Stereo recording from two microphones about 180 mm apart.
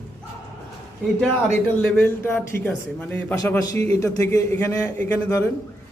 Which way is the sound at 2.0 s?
10° left (ahead or behind).